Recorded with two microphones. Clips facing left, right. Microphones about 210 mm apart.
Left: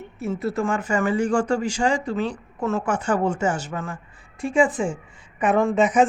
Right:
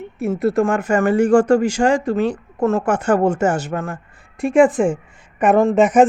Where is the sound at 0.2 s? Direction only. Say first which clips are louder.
Right 7 dB; 60° right (ahead or behind).